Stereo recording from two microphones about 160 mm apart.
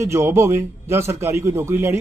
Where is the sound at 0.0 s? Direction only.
15° right (ahead or behind).